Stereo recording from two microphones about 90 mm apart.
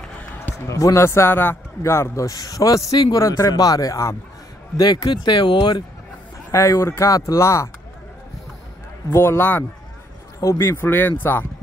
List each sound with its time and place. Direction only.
0.7 s a man's voice: 35° left (ahead or behind)
4.7 s speech: 50° left (ahead or behind)
6.5 s a man's voice: 35° left (ahead or behind)
7.1 s a man's voice: 40° left (ahead or behind)
9.1 s speech: 30° left (ahead or behind)